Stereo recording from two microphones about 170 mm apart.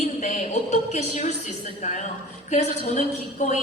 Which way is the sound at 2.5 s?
45° left (ahead or behind).